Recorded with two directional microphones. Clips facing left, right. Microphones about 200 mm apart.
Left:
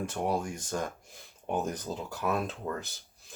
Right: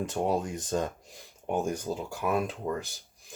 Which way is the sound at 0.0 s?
20° right (ahead or behind).